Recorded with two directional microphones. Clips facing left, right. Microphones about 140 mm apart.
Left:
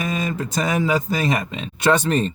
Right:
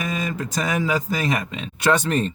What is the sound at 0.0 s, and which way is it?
Speech, 25° left (ahead or behind).